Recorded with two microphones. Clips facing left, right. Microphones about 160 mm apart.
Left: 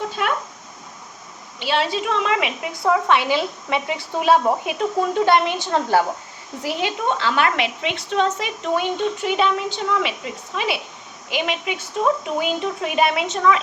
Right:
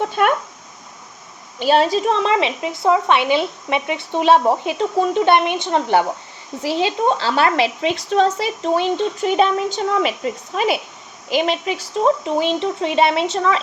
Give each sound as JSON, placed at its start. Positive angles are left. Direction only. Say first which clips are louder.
{"t": 1.5, "sound": "a woman's voice", "louder": "right 6 dB", "side_deg": -45}
{"t": 11.3, "sound": "speech", "louder": "right 5 dB", "side_deg": -35}